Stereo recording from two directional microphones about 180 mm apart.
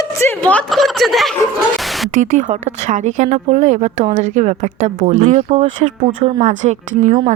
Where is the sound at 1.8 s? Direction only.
Centre (ahead or behind).